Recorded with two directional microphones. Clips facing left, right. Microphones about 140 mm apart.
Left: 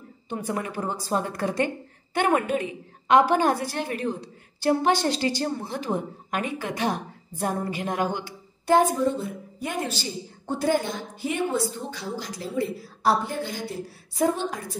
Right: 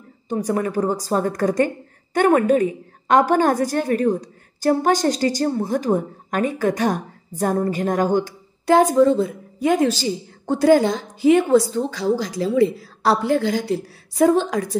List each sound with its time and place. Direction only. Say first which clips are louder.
0.3 s a woman's voice: right 8 dB; 40° right (ahead or behind)
8.6 s a woman's voice: right 6 dB; 90° right